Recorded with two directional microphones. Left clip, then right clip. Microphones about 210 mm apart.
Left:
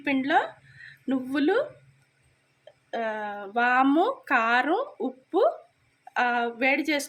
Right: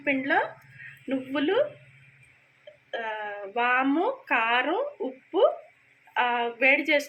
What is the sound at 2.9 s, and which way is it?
Speech, 65° left (ahead or behind).